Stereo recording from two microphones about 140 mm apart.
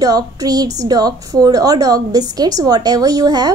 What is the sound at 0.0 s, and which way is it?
A woman's voice, 25° right (ahead or behind).